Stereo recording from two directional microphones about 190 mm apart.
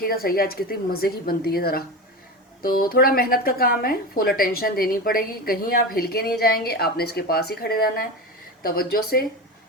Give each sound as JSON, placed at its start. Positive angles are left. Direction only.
{"t": 0.0, "sound": "a woman's voice", "side_deg": 50}